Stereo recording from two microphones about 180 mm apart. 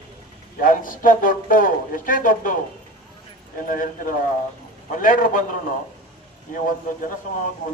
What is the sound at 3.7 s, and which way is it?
Speech, 50° left (ahead or behind).